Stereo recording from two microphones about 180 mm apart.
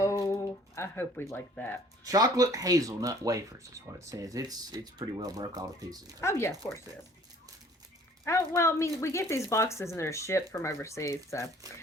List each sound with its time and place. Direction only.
0.0 s a sound: 15° left (ahead or behind)
2.0 s speech: 20° right (ahead or behind)
6.1 s speech: 15° left (ahead or behind)
8.2 s speech: 15° left (ahead or behind)